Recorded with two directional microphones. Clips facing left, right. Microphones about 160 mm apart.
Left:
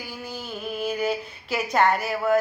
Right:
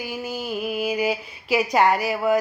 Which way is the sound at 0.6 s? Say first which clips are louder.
Right 2 dB; 10° right (ahead or behind).